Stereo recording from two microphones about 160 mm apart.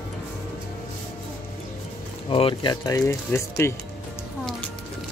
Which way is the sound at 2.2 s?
35° left (ahead or behind).